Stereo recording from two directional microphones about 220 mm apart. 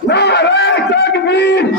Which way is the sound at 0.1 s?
50° left (ahead or behind).